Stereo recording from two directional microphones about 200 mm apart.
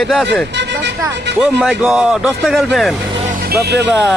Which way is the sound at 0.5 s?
60° right (ahead or behind).